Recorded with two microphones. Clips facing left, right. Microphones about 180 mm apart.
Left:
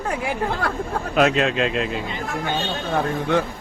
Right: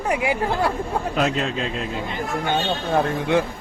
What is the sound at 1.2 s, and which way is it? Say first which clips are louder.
Speech: left 6 dB; 70° left (ahead or behind).